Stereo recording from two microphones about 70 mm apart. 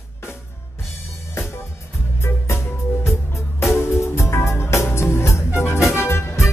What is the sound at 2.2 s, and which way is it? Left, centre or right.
Music, left.